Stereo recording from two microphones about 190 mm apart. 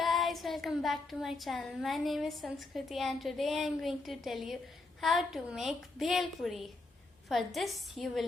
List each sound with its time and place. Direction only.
0.0 s child singing: centre (ahead or behind)